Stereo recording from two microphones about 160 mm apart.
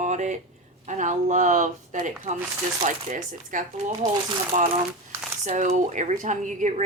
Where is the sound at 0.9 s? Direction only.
50° right (ahead or behind).